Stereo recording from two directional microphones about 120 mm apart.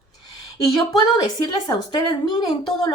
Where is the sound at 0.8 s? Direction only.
35° left (ahead or behind).